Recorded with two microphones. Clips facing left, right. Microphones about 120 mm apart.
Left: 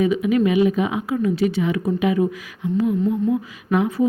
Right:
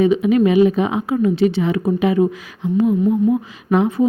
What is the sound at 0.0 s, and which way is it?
Speech, 30° right (ahead or behind).